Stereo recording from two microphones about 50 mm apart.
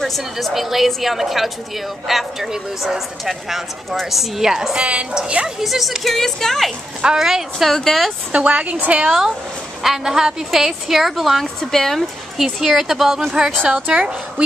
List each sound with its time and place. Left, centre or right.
0.0 s speech: centre
4.7 s a woman's voice: right
5.6 s speech: centre
7.2 s a woman's voice: centre
7.7 s speech: centre
8.3 s a woman's voice: right
9.8 s speech: centre
13.3 s a woman's voice: centre